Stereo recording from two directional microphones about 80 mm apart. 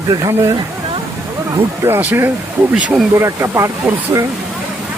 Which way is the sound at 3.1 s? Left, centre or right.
Right.